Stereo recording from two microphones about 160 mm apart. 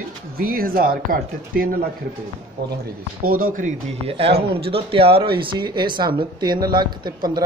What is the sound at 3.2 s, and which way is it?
Speech, 60° right (ahead or behind).